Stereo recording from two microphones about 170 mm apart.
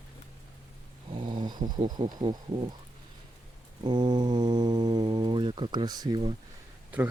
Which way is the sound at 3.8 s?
25° right (ahead or behind).